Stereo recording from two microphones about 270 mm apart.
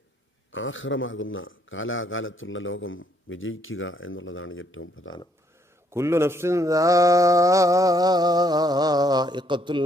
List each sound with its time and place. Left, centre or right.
0.5 s a man's voice: left
5.9 s mantra: centre